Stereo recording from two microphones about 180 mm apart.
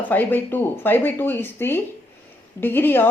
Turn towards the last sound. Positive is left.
turn(degrees=10)  # may be behind; listen again after turning